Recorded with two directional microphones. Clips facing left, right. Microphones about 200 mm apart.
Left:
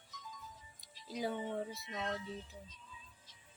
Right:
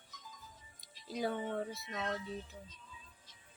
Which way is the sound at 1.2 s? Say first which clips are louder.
Right 2 dB; 5° left (ahead or behind).